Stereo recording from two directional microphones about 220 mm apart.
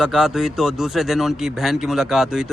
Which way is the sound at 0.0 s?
Centre (ahead or behind).